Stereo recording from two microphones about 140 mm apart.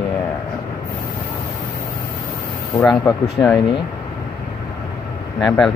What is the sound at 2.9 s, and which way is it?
Speech, 10° left (ahead or behind).